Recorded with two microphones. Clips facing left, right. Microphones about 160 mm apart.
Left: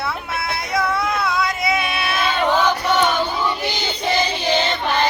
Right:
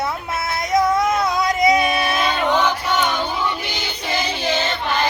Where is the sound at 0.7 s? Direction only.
20° right (ahead or behind).